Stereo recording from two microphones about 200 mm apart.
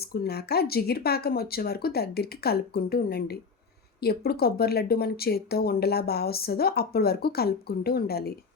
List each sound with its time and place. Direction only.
0.0 s speech: 50° left (ahead or behind)